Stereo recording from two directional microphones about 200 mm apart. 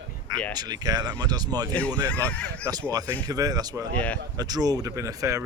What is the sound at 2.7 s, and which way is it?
Speech, 15° right (ahead or behind).